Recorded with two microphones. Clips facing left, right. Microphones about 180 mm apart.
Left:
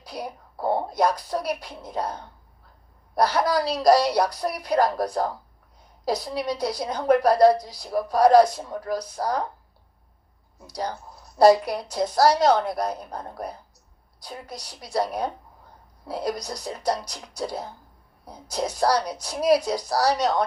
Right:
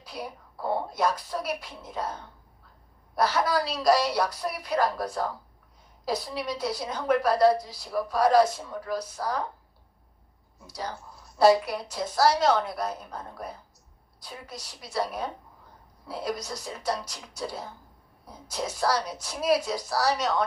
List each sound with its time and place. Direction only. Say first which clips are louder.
0.0 s a woman's voice: left 3 dB; 40° left (ahead or behind)
11.3 s a woman's voice: left 4 dB; 40° left (ahead or behind)